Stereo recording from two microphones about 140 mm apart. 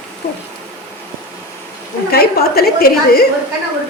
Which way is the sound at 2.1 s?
90° left.